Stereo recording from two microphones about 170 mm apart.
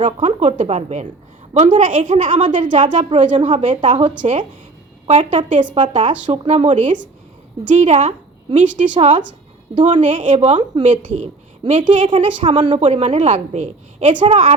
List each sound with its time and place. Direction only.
0.0 s speech: 40° right (ahead or behind)
3.8 s a woman's voice: 30° right (ahead or behind)
4.2 s speech: 45° right (ahead or behind)
5.0 s a woman's voice: 35° right (ahead or behind)
11.6 s a woman's voice: 25° right (ahead or behind); by 14.3 s 45° right (ahead or behind)
14.3 s a woman's voice: 35° right (ahead or behind)